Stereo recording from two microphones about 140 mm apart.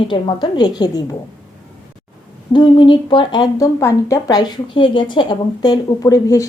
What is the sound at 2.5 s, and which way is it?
Speech, 35° left (ahead or behind).